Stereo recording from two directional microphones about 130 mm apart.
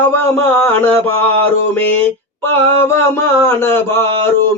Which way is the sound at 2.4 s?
15° left (ahead or behind).